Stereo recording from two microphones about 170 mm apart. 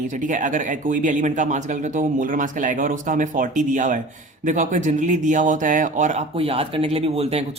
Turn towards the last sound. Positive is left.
turn(degrees=-35)  # may be behind; listen again after turning